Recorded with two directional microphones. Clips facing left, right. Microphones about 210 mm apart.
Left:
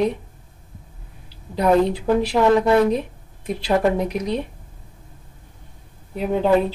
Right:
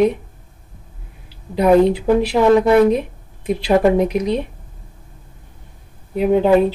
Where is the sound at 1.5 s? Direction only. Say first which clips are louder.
Right 5 dB; 15° right (ahead or behind).